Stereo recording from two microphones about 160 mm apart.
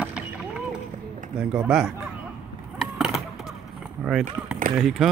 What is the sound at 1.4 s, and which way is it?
Speech, 5° right (ahead or behind).